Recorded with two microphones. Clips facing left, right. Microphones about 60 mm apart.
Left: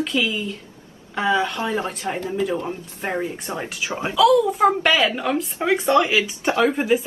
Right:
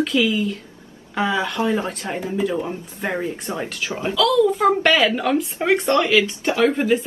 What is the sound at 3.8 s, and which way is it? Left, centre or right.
Speech, left.